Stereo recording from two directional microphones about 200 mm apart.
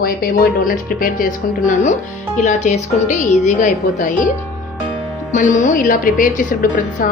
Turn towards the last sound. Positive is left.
turn(degrees=45)  # may be behind; listen again after turning